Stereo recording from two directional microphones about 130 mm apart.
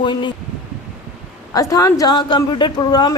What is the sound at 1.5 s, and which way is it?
A woman's voice, 25° left (ahead or behind).